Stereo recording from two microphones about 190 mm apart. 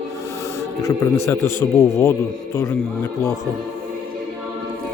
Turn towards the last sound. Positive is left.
turn(degrees=10)  # may be behind; listen again after turning